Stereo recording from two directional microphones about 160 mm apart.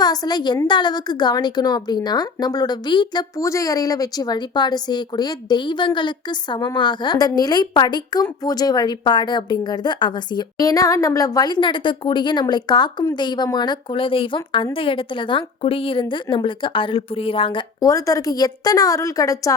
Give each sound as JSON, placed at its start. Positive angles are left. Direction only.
{"t": 0.0, "sound": "a woman's voice", "side_deg": 25}